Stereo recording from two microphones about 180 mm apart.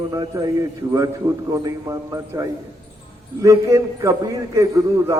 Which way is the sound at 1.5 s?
20° right (ahead or behind).